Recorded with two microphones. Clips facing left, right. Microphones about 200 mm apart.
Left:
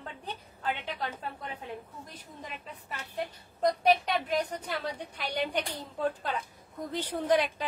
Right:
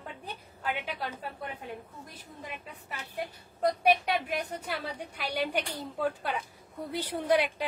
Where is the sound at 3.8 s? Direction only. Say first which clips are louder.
Right 1 dB; 10° right (ahead or behind).